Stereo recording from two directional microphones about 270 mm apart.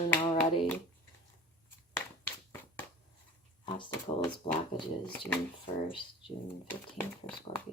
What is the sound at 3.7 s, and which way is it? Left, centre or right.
Speech, centre.